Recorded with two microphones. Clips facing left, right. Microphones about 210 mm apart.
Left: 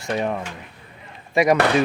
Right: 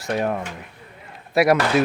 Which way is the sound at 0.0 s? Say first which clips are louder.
Right 1 dB; centre (ahead or behind).